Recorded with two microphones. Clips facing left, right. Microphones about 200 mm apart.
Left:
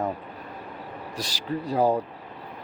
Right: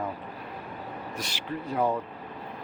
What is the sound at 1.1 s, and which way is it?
Speech, 35° left (ahead or behind).